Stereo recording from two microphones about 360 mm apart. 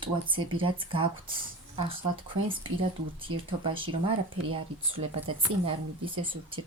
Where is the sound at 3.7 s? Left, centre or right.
Centre.